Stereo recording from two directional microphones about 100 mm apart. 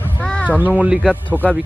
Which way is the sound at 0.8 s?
10° right (ahead or behind).